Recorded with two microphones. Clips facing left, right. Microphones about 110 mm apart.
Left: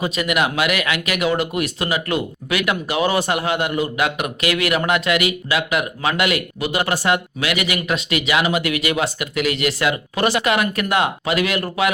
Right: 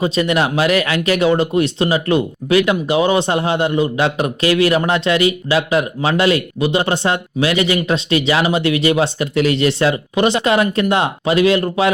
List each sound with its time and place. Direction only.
0.0 s speech: 30° right (ahead or behind)